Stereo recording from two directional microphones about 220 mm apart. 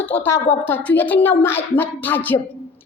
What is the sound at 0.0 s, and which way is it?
A woman's voice, 10° left (ahead or behind).